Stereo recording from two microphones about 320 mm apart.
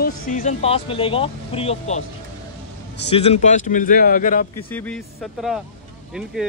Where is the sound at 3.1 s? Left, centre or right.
Centre.